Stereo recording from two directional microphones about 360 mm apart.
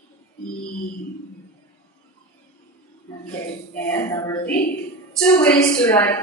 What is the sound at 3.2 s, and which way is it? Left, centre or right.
Music, centre.